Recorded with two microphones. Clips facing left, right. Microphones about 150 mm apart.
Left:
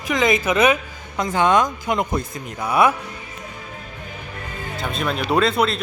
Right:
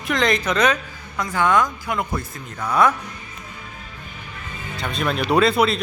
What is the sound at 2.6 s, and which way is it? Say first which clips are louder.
Speech: left 1 dB; 10° left (ahead or behind).